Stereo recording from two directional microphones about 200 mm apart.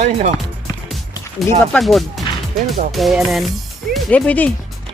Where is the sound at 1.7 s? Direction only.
Centre (ahead or behind).